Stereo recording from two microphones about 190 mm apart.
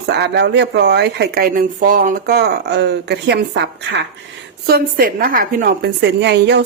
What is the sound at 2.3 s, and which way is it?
A woman's voice, 60° right (ahead or behind).